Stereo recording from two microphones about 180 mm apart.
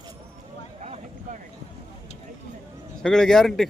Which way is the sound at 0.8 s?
40° right (ahead or behind).